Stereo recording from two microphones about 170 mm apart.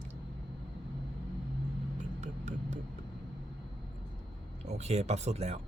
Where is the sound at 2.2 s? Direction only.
45° right (ahead or behind).